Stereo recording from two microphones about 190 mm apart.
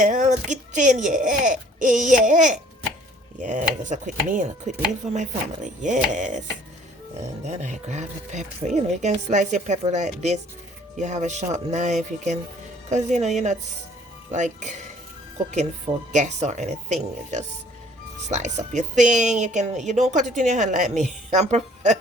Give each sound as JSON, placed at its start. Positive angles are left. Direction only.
{"t": 0.0, "sound": "speech", "side_deg": -40}
{"t": 7.4, "sound": "speech", "side_deg": -40}
{"t": 16.1, "sound": "speech", "side_deg": -40}